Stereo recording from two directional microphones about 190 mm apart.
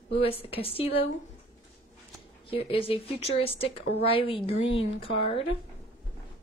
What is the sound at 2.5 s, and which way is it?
A woman's voice, 30° left (ahead or behind).